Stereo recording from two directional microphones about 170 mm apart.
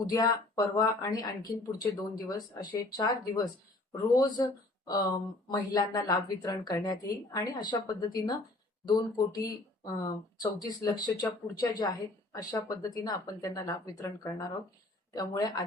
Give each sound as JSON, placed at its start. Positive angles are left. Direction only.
{"t": 0.0, "sound": "speech", "side_deg": 20}
{"t": 4.9, "sound": "speech", "side_deg": 20}